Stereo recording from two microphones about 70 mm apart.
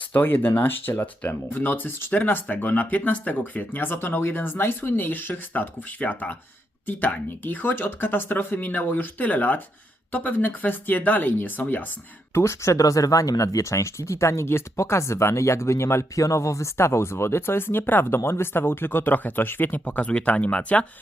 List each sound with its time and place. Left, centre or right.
0.1 s speech: left
12.3 s speech: left; by 20.8 s centre